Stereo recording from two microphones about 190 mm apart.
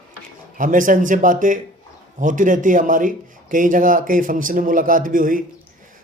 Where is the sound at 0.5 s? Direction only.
45° right (ahead or behind).